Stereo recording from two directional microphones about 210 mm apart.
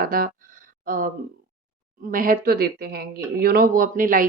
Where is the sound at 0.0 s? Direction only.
45° right (ahead or behind).